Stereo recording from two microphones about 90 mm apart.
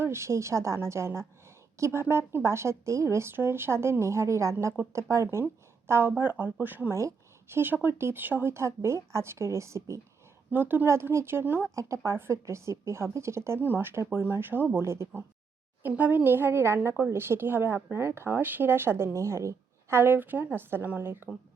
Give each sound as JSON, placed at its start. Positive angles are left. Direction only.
{"t": 0.0, "sound": "a woman's voice", "side_deg": -30}
{"t": 10.5, "sound": "a woman's voice", "side_deg": -20}
{"t": 15.8, "sound": "a woman's voice", "side_deg": -20}